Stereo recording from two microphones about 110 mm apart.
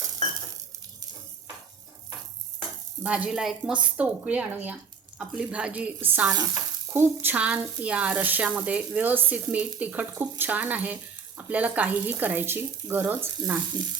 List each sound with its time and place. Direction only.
2.6 s stir: 10° right (ahead or behind)
6.3 s frying: 40° right (ahead or behind)
6.9 s speech: 20° right (ahead or behind)